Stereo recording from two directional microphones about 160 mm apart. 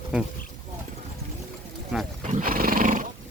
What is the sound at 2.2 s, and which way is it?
Horse, 55° right (ahead or behind).